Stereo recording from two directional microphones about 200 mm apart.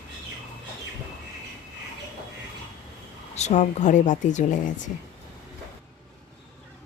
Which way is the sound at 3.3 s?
35° left (ahead or behind).